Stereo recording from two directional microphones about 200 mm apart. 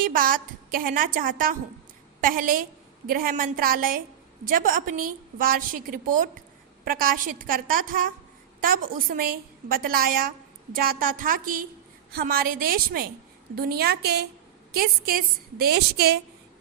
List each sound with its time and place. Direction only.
0.0 s a woman's voice: 45° right (ahead or behind)